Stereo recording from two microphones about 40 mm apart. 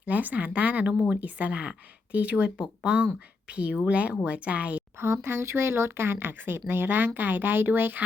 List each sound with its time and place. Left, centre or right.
0.0 s speech: right
4.9 s speech: right